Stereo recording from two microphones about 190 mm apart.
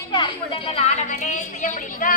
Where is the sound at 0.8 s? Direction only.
35° left (ahead or behind).